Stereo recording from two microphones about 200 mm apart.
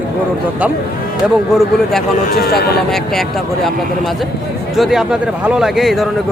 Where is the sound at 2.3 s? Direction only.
50° left (ahead or behind).